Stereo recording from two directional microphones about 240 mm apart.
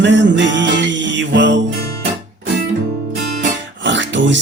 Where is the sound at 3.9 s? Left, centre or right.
Right.